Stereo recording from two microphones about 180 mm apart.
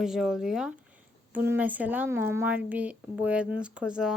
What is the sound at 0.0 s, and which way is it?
Speech, centre (ahead or behind).